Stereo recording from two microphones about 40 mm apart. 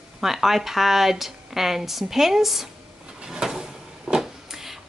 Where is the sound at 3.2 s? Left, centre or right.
Centre.